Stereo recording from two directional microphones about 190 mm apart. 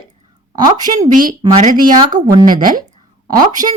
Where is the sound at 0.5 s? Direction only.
20° right (ahead or behind).